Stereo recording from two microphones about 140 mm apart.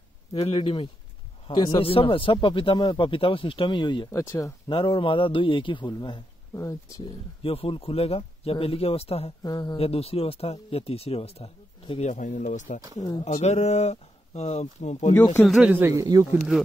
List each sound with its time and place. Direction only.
0.3 s speech: 45° left (ahead or behind)
4.1 s speech: 20° left (ahead or behind)
4.6 s speech: 35° left (ahead or behind)
6.5 s speech: 20° left (ahead or behind)
7.4 s speech: 40° left (ahead or behind)
9.4 s speech: 30° left (ahead or behind)
9.8 s speech: 45° left (ahead or behind)
12.1 s speech: 60° left (ahead or behind)
15.4 s speech: centre (ahead or behind)
16.0 s speech: 25° right (ahead or behind)